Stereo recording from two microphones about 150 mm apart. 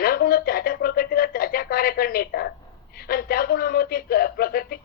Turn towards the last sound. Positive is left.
turn(degrees=90)